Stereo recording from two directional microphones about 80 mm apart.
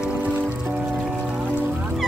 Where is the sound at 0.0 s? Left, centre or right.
Centre.